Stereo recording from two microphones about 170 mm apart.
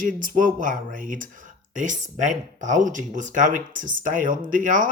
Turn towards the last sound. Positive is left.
turn(degrees=-50)  # may be behind; listen again after turning